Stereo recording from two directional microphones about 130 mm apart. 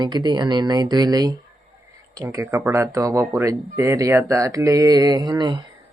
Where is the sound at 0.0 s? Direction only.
30° right (ahead or behind).